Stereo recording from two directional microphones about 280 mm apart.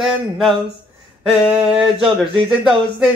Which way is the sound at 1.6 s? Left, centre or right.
Centre.